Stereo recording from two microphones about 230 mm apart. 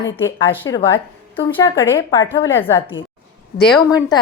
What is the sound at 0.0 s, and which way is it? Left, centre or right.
A woman's voice, centre.